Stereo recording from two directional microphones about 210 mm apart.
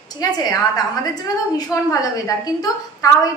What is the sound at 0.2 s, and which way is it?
A woman's voice, 15° left (ahead or behind).